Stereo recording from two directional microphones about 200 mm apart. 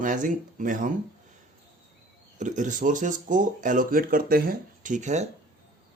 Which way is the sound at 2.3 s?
40° right (ahead or behind).